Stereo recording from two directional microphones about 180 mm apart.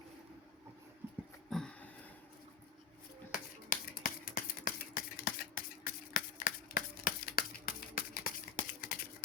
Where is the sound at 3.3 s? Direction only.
50° left (ahead or behind).